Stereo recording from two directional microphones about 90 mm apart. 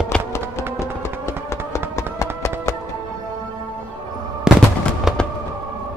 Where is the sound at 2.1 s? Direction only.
30° left (ahead or behind).